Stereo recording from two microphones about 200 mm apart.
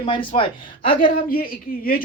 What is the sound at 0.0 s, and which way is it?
Speech, 25° left (ahead or behind).